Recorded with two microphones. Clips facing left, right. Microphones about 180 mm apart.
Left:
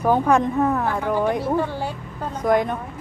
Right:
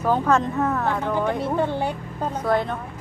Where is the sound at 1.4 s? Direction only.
20° right (ahead or behind).